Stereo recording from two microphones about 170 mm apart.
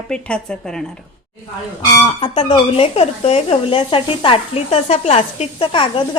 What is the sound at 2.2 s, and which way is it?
Speech, 30° left (ahead or behind).